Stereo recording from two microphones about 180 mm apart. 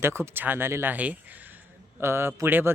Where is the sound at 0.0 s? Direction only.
15° right (ahead or behind).